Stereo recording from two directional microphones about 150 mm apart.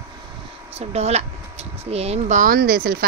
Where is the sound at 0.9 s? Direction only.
45° right (ahead or behind).